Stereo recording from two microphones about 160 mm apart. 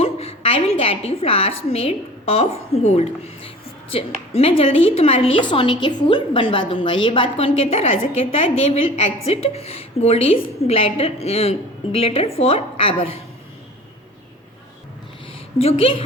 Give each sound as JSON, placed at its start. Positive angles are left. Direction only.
{"t": 0.0, "sound": "a woman's voice", "side_deg": 35}
{"t": 15.5, "sound": "a woman's voice", "side_deg": 35}